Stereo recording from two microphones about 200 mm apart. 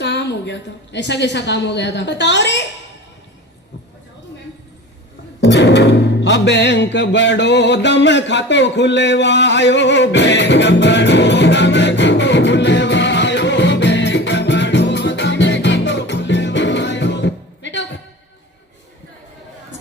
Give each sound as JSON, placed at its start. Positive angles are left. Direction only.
{"t": 0.0, "sound": "a woman's voice", "side_deg": 60}
{"t": 5.4, "sound": "music", "side_deg": 60}